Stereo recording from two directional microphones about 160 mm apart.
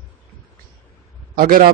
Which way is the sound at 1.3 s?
60° right (ahead or behind).